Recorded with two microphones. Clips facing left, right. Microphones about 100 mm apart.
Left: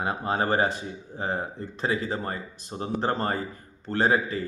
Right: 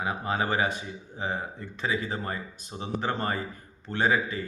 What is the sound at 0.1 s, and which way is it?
Speech, 35° left (ahead or behind).